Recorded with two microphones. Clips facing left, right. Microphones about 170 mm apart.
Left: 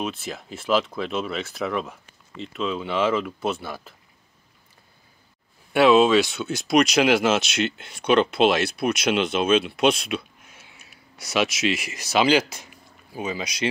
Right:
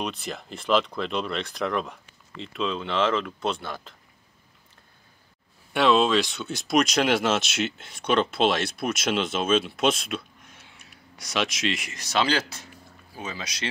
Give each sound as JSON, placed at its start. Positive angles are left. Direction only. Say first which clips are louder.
{"t": 0.0, "sound": "speech", "louder": "left 2 dB", "side_deg": 0}
{"t": 5.7, "sound": "speech", "louder": "left 5 dB", "side_deg": 5}